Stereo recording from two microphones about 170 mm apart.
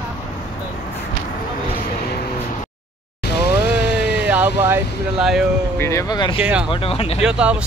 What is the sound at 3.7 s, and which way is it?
Vehicle, 10° right (ahead or behind).